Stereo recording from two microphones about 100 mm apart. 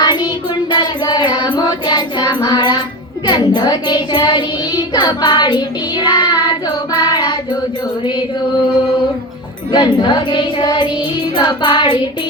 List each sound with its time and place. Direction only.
0.0 s child singing: 45° left (ahead or behind)
0.7 s music: 50° left (ahead or behind)
3.2 s child singing: 45° left (ahead or behind)
9.7 s music: 50° left (ahead or behind)